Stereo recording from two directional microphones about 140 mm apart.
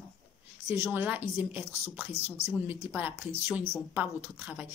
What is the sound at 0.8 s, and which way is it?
Speech, 15° right (ahead or behind).